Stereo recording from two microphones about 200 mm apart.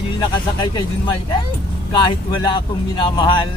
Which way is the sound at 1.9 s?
20° left (ahead or behind).